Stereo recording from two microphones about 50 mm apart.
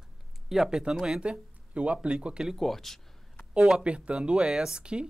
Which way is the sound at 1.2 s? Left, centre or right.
Right.